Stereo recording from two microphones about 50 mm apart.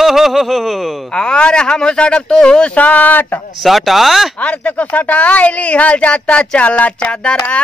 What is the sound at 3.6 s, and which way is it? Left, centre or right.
Speech, centre.